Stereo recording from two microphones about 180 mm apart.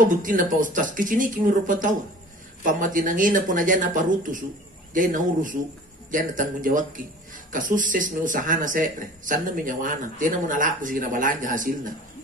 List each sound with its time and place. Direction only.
0.1 s a man's voice: 50° right (ahead or behind)